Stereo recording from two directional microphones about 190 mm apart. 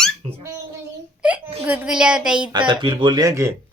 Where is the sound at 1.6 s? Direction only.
5° right (ahead or behind).